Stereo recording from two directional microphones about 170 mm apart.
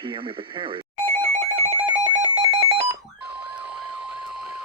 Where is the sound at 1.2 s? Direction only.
35° right (ahead or behind).